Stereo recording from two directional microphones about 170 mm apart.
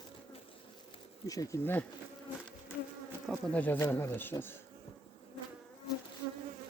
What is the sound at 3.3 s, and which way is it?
Speech, 10° left (ahead or behind).